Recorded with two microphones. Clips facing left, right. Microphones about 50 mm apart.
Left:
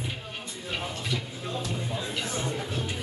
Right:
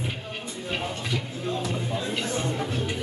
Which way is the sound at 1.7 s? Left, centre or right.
Right.